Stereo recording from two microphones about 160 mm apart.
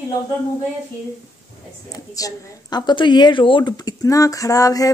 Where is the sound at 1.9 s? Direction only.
20° left (ahead or behind).